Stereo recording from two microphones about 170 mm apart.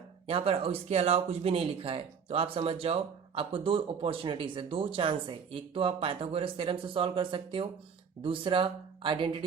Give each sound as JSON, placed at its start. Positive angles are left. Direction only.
{"t": 0.3, "sound": "speech", "side_deg": -35}